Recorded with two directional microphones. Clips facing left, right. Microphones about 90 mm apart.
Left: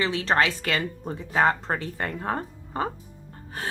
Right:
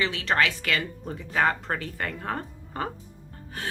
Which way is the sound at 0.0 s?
30° left (ahead or behind).